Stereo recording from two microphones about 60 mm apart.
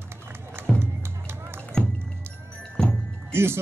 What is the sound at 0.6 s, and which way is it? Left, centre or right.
Music, right.